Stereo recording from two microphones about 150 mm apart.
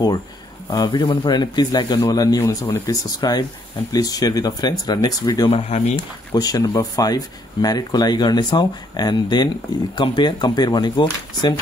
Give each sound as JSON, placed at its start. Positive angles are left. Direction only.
{"t": 0.7, "sound": "speech", "side_deg": 25}
{"t": 5.5, "sound": "speech", "side_deg": 45}
{"t": 6.3, "sound": "speech", "side_deg": 25}